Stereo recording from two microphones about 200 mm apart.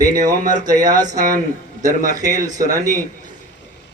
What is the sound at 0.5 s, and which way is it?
Speech, 20° right (ahead or behind).